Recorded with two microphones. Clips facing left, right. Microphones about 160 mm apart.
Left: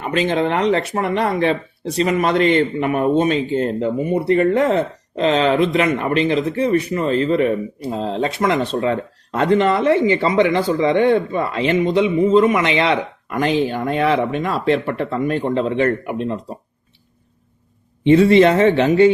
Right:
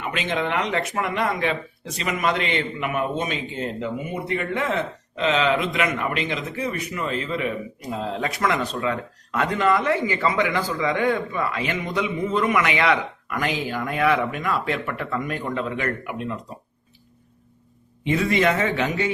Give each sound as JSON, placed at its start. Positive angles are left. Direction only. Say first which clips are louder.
{"t": 0.0, "sound": "speech", "louder": "left 7 dB", "side_deg": 35}
{"t": 18.0, "sound": "speech", "louder": "left 10 dB", "side_deg": 30}